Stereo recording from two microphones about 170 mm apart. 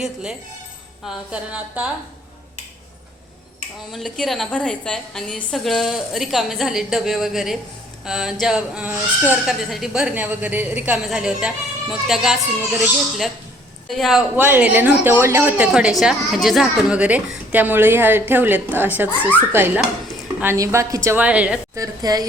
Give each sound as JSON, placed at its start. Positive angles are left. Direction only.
{"t": 0.0, "sound": "a woman's voice", "side_deg": -5}
{"t": 3.9, "sound": "speech", "side_deg": 0}
{"t": 14.4, "sound": "a woman's voice", "side_deg": -10}
{"t": 21.8, "sound": "a woman's voice", "side_deg": -20}